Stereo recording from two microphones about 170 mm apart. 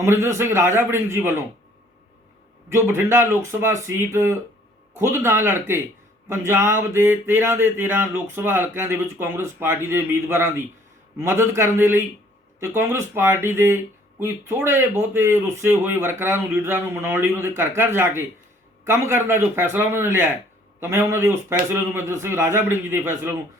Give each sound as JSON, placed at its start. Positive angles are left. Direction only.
{"t": 0.0, "sound": "speech", "side_deg": -15}
{"t": 2.6, "sound": "speech", "side_deg": -15}